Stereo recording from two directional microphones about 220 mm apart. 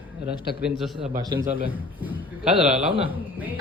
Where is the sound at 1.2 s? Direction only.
15° right (ahead or behind).